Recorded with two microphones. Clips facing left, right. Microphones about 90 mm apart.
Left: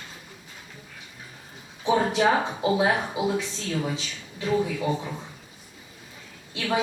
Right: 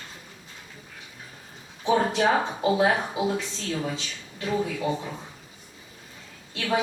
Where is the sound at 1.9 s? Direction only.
10° left (ahead or behind).